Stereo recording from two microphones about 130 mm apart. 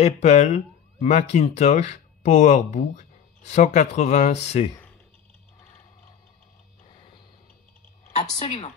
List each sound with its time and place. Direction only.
0.0 s speech: 55° left (ahead or behind)
6.9 s a sound: 40° left (ahead or behind)
8.4 s speech: 55° left (ahead or behind)